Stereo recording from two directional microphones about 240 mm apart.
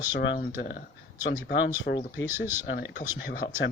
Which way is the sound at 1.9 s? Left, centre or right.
Left.